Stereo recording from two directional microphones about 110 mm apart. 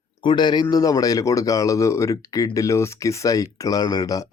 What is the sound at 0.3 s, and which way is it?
A man's voice, 45° left (ahead or behind).